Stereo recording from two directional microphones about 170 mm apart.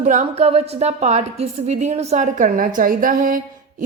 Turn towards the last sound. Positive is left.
turn(degrees=-50)  # may be behind; listen again after turning